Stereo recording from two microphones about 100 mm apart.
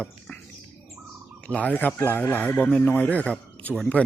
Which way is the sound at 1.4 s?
15° left (ahead or behind).